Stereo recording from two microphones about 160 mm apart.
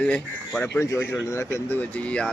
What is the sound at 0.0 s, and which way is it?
Speech, 5° left (ahead or behind).